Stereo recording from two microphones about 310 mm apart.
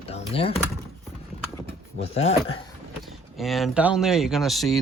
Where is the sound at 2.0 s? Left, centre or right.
Centre.